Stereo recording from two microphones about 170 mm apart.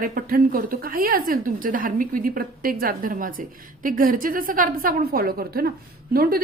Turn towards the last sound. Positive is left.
turn(degrees=-60)  # may be behind; listen again after turning